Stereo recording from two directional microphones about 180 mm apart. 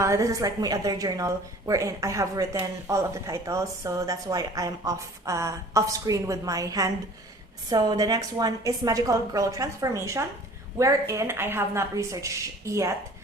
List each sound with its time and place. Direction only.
0.0 s a woman's voice: 15° right (ahead or behind)